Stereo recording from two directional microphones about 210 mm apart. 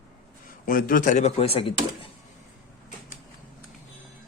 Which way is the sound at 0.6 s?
40° left (ahead or behind).